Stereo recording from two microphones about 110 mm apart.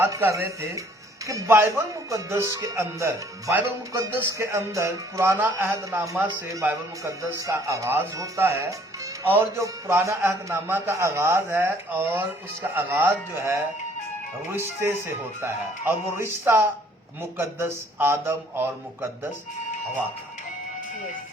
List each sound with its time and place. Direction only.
0.0 s a man's voice: 25° right (ahead or behind)